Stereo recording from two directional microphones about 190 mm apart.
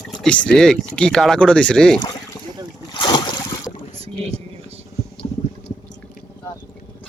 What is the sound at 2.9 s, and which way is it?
Boat, 25° left (ahead or behind).